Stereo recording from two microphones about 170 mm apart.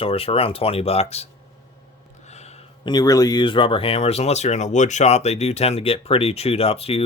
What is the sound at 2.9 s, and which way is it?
Speech, 20° left (ahead or behind).